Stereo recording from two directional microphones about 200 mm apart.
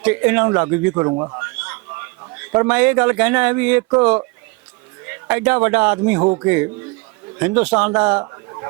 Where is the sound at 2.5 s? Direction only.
5° right (ahead or behind).